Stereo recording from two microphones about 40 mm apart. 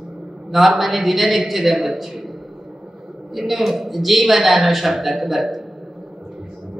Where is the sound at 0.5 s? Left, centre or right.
Centre.